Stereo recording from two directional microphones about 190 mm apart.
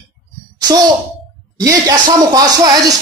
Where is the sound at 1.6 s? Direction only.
20° right (ahead or behind).